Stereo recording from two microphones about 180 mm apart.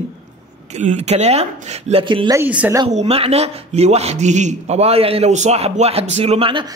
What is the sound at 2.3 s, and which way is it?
Speech, 10° right (ahead or behind).